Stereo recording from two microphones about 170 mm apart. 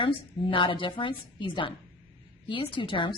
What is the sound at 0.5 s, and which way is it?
A woman's voice, 30° left (ahead or behind).